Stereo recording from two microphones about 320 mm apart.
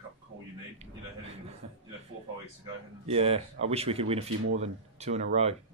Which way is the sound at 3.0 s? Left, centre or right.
Centre.